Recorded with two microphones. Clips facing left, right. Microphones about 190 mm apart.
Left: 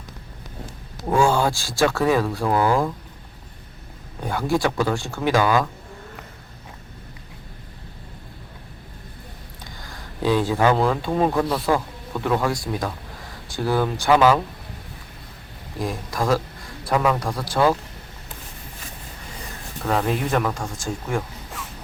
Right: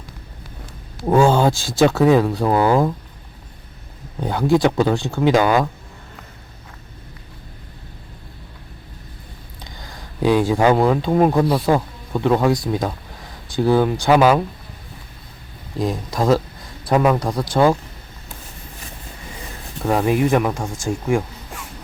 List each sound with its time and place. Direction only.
1.0 s speech: 20° right (ahead or behind)
4.3 s speech: 20° right (ahead or behind)
10.2 s speech: 15° right (ahead or behind)
15.8 s speech: 20° right (ahead or behind)
19.9 s speech: 15° right (ahead or behind)